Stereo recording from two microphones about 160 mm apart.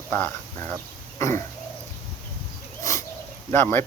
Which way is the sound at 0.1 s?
15° left (ahead or behind).